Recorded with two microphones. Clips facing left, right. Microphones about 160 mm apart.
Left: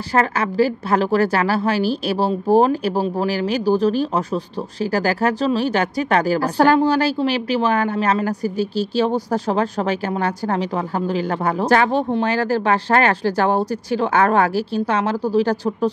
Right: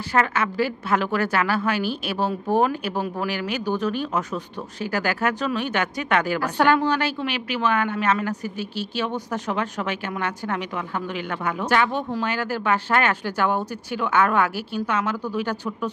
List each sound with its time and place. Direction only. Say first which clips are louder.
0.1 s a woman's voice: left 3 dB; 35° left (ahead or behind)